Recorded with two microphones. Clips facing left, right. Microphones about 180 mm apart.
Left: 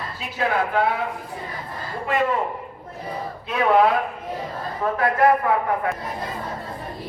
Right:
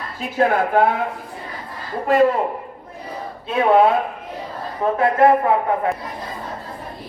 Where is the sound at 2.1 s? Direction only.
40° right (ahead or behind).